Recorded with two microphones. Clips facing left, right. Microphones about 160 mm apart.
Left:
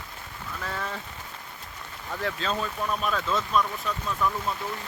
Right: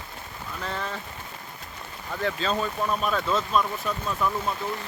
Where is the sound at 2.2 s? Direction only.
Centre (ahead or behind).